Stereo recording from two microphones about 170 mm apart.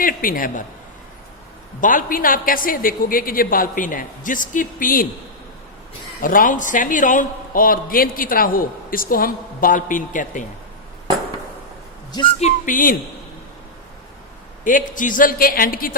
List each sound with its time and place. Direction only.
0.0 s a man's voice: 55° left (ahead or behind)
1.8 s a man's voice: 50° left (ahead or behind)
6.2 s a man's voice: 55° left (ahead or behind)
12.4 s speech: 45° left (ahead or behind)
14.6 s a man's voice: 50° left (ahead or behind)